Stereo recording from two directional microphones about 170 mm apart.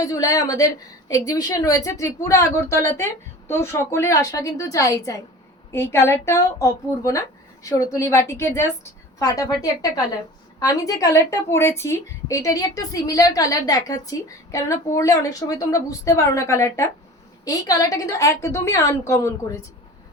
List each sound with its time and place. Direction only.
0.1 s a woman's voice: 20° left (ahead or behind)